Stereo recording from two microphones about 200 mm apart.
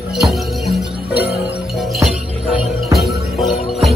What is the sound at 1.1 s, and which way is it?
Music, 55° left (ahead or behind).